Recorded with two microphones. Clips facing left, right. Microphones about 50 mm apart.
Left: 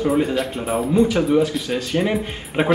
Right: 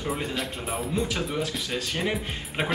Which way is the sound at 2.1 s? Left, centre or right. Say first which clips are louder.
Left 6 dB; centre.